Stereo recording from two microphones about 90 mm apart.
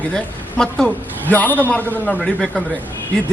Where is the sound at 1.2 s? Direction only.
20° left (ahead or behind).